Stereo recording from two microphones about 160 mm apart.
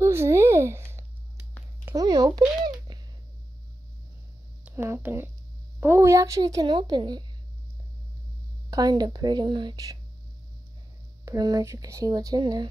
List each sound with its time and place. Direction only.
0.0 s a sound: 15° right (ahead or behind)
4.6 s speech: 15° right (ahead or behind)
8.6 s speech: 25° right (ahead or behind)
11.2 s speech: 25° right (ahead or behind)